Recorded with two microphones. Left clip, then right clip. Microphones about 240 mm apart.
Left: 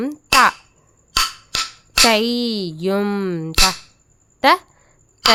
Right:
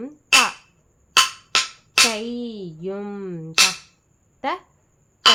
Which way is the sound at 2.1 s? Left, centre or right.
Left.